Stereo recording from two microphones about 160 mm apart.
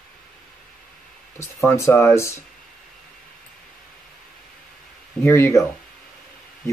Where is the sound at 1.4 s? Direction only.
15° left (ahead or behind).